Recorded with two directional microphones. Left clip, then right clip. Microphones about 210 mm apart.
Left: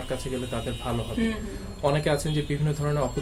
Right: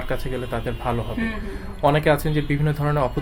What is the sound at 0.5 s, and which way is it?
Speech, 40° right (ahead or behind).